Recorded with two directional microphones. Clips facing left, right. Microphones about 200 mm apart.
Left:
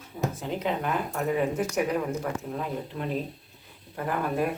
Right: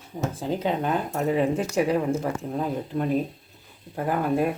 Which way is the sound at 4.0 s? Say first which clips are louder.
Right 4 dB; 30° right (ahead or behind).